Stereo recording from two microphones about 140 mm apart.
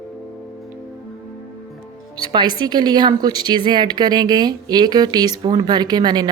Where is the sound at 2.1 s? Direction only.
30° right (ahead or behind).